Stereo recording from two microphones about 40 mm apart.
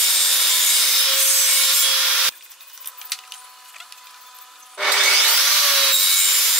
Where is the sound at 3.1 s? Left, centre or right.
Centre.